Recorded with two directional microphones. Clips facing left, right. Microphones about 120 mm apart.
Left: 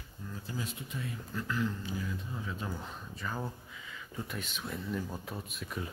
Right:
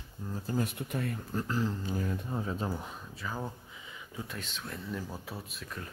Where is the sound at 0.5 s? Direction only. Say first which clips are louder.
Right 8 dB; 60° right (ahead or behind).